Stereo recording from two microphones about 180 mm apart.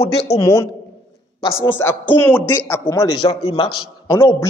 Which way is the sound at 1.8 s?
10° left (ahead or behind).